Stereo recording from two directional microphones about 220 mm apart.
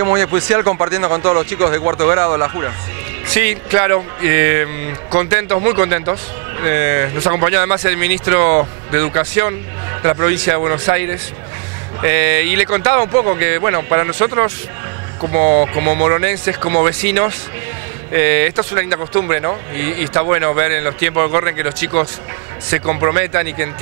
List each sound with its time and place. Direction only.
0.0 s speech: 20° right (ahead or behind)